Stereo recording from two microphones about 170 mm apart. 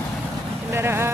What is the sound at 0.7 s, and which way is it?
Speech, 15° right (ahead or behind).